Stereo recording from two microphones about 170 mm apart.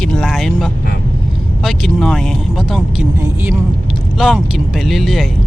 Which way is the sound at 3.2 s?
10° right (ahead or behind).